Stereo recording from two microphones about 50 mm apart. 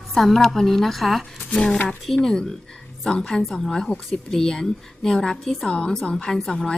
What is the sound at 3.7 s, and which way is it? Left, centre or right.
A woman's voice, centre.